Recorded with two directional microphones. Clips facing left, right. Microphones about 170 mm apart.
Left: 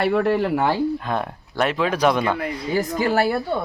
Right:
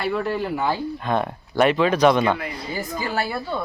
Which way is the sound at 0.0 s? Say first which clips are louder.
Left 5 dB; 65° left (ahead or behind).